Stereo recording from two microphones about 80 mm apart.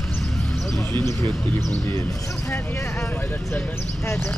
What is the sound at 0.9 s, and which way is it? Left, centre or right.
Speech, left.